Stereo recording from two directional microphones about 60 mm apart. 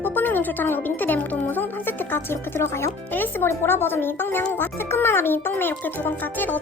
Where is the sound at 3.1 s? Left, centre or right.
Left.